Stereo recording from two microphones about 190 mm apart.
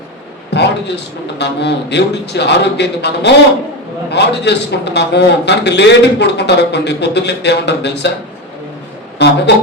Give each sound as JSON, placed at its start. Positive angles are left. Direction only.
{"t": 0.5, "sound": "a sound", "side_deg": 65}
{"t": 1.4, "sound": "a man's voice", "side_deg": 65}
{"t": 9.2, "sound": "a man's voice", "side_deg": 65}